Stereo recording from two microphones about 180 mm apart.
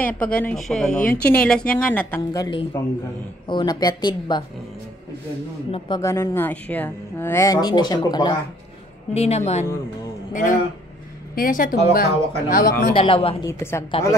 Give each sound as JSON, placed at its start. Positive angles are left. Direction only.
{"t": 0.0, "sound": "a woman's voice", "side_deg": 10}
{"t": 5.9, "sound": "a woman's voice", "side_deg": 15}
{"t": 9.1, "sound": "a woman's voice", "side_deg": 35}
{"t": 12.9, "sound": "a woman's voice", "side_deg": 30}
{"t": 13.5, "sound": "a woman's voice", "side_deg": 15}